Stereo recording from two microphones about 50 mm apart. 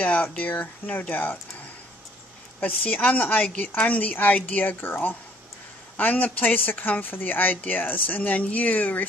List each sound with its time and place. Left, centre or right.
0.0 s speech: left
2.6 s speech: left